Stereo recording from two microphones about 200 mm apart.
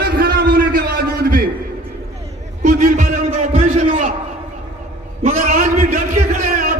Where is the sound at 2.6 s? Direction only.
40° right (ahead or behind).